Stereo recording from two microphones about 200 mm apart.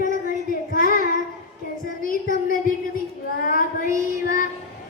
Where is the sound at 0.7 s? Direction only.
45° left (ahead or behind).